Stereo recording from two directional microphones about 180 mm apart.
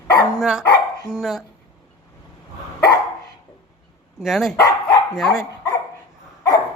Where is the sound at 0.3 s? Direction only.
5° right (ahead or behind).